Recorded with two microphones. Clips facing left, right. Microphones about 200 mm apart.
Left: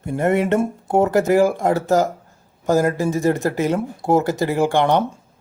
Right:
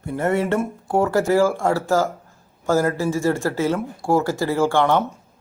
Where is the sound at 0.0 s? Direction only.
20° left (ahead or behind).